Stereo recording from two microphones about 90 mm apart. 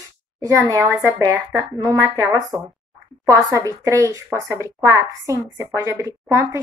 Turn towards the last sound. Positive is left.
turn(degrees=-35)  # may be behind; listen again after turning